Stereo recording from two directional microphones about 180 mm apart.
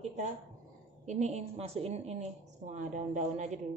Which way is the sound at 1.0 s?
40° right (ahead or behind).